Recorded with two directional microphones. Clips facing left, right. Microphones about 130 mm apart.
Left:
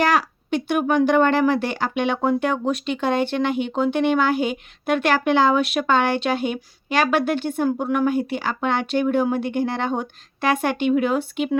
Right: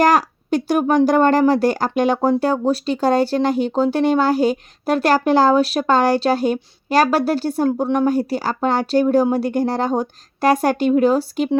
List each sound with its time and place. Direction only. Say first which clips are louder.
0.0 s speech: right 5 dB; 40° right (ahead or behind)